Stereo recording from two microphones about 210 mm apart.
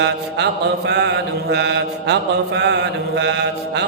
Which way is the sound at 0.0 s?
55° right (ahead or behind).